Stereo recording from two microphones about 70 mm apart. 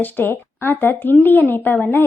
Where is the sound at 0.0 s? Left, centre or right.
Left.